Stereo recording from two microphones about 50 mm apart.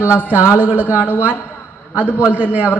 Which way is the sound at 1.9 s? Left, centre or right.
Left.